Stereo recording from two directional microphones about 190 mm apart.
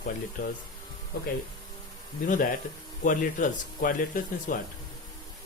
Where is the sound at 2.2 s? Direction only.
45° left (ahead or behind).